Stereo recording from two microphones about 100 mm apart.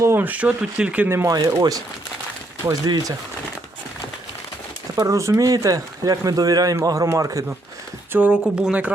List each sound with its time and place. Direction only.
0.0 s speech: 20° right (ahead or behind)
1.1 s speech: 30° right (ahead or behind)
4.9 s speech: 35° right (ahead or behind)
8.1 s speech: 10° right (ahead or behind)